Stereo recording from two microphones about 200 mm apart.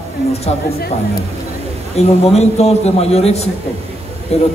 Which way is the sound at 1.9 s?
30° left (ahead or behind).